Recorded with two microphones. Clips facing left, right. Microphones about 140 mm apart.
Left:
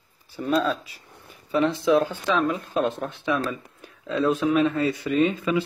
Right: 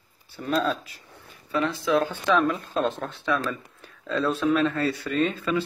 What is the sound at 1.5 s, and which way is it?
Speech, 20° left (ahead or behind).